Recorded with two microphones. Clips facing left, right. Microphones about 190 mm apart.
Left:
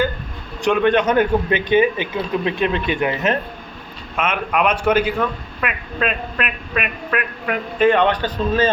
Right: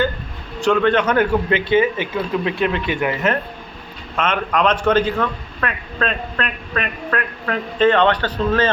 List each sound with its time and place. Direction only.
0.6 s a man's voice: 15° left (ahead or behind)
4.2 s a man's voice: 10° left (ahead or behind)